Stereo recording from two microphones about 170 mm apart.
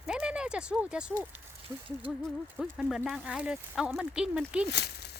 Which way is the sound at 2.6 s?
5° right (ahead or behind).